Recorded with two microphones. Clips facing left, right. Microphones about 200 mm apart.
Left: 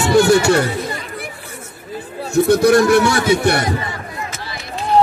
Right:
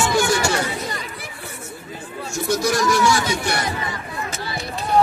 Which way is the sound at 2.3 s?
60° left (ahead or behind).